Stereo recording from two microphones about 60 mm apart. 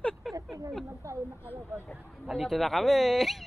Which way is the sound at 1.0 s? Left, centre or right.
Right.